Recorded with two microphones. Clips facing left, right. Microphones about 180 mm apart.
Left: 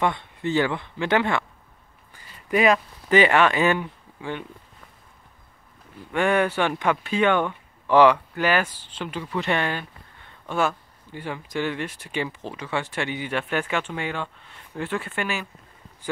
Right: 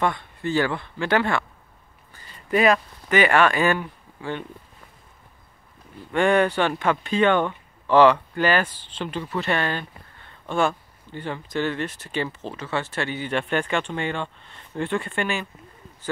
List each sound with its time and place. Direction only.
0.0 s speech: 20° left (ahead or behind)
2.1 s a sound: 10° left (ahead or behind)
3.1 s speech: 25° left (ahead or behind)
6.1 s speech: 10° left (ahead or behind)
11.1 s speech: 10° left (ahead or behind)